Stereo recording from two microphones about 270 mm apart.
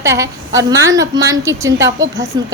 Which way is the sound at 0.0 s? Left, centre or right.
Centre.